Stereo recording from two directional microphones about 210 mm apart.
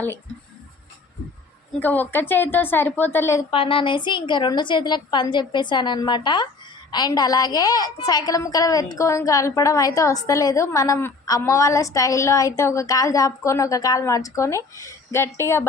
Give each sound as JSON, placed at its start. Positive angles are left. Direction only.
{"t": 1.8, "sound": "a woman's voice", "side_deg": 10}
{"t": 3.5, "sound": "a woman's voice", "side_deg": 25}